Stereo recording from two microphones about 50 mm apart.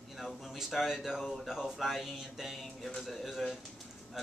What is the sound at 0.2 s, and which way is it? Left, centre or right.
A man's voice, centre.